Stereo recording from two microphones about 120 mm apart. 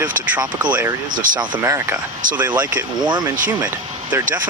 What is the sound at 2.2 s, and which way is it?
Speech, 90° right.